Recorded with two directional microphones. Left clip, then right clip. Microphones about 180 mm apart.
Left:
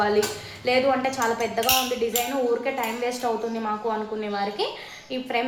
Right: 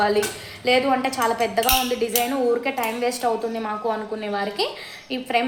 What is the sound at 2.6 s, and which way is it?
A woman's voice, 45° right (ahead or behind).